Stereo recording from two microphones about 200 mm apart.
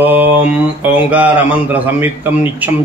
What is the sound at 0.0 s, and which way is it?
Mantra, 10° right (ahead or behind).